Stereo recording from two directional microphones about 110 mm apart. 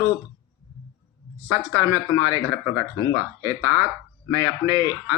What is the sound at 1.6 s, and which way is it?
Speech, 25° right (ahead or behind).